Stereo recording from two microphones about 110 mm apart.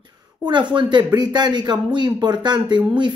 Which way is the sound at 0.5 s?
45° right (ahead or behind).